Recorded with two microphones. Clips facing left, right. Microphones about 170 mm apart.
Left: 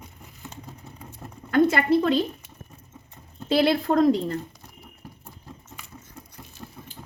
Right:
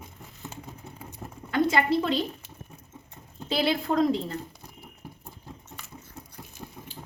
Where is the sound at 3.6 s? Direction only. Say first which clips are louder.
Left 4 dB; 50° left (ahead or behind).